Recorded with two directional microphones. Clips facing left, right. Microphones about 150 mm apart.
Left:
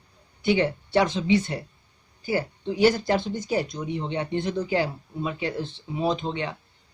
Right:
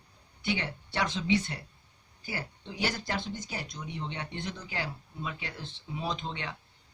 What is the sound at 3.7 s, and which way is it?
Speech, 45° left (ahead or behind).